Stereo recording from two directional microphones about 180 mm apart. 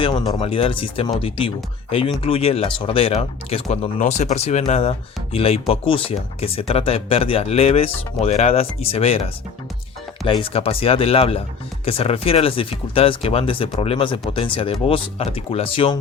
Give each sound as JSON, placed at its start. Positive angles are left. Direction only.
{"t": 0.0, "sound": "speech", "side_deg": 25}
{"t": 10.2, "sound": "speech", "side_deg": 30}